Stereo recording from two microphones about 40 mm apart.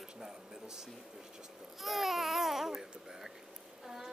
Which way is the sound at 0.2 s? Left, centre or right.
Centre.